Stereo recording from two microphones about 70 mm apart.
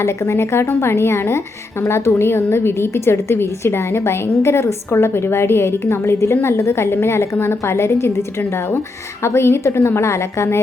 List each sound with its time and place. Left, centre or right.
0.0 s a woman's voice: left